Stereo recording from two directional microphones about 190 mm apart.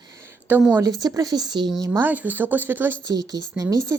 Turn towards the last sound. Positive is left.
turn(degrees=-15)  # may be behind; listen again after turning